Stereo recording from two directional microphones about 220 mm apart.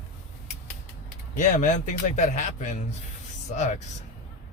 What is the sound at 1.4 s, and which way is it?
Speech, 35° left (ahead or behind).